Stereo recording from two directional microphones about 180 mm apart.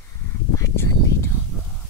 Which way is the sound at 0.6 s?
15° left (ahead or behind).